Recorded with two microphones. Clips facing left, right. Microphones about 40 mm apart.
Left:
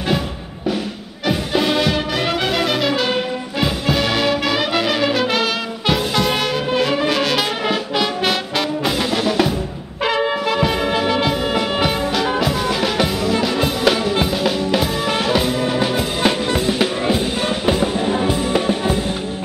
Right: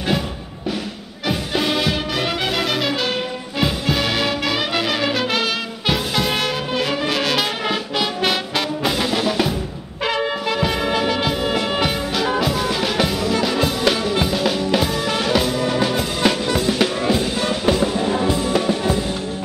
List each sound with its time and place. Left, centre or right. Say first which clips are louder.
1.2 s music: left 3 dB; centre